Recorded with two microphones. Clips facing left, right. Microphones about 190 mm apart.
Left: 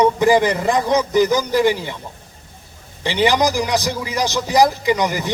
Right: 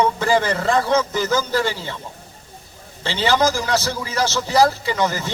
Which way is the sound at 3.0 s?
15° left (ahead or behind).